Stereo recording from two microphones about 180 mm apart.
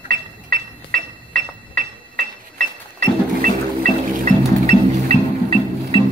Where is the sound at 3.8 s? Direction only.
45° right (ahead or behind).